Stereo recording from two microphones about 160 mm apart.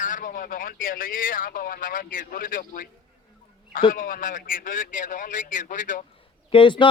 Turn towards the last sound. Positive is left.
turn(degrees=30)  # may be behind; listen again after turning